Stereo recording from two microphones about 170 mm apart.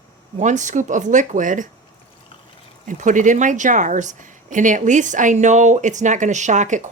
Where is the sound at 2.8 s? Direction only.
50° right (ahead or behind).